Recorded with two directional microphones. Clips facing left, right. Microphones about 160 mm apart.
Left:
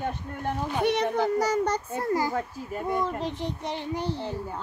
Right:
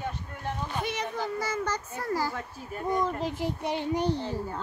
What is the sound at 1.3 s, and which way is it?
Speech, 40° left (ahead or behind).